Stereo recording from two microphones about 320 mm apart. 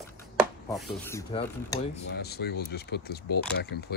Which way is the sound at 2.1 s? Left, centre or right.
Left.